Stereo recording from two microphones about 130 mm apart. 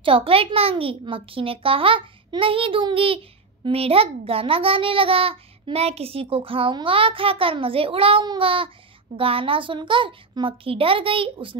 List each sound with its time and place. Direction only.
0.0 s a child's voice: 45° right (ahead or behind)